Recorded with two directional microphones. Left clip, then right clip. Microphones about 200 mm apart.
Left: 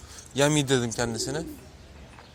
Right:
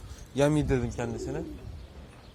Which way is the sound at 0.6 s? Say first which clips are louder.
Left 5 dB; 10° left (ahead or behind).